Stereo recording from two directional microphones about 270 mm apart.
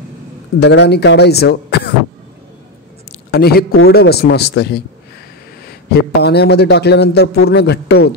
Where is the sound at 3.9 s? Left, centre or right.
Left.